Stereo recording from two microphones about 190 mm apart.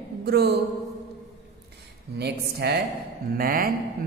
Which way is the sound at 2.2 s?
60° right (ahead or behind).